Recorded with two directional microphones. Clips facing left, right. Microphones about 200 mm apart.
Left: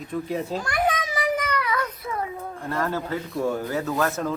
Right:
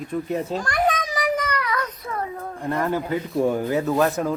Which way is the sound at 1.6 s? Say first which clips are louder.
Even; 5° left (ahead or behind).